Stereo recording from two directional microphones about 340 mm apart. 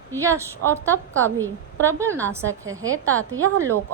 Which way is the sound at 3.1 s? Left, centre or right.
Right.